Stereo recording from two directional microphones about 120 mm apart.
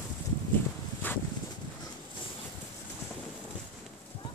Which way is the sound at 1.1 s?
15° left (ahead or behind).